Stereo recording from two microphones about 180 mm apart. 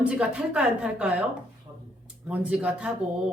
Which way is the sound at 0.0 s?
5° right (ahead or behind).